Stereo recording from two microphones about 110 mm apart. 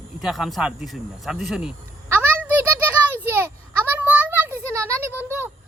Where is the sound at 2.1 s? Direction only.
15° right (ahead or behind).